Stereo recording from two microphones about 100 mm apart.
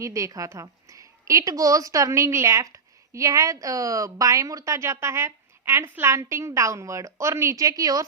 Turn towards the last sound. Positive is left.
turn(degrees=-35)  # may be behind; listen again after turning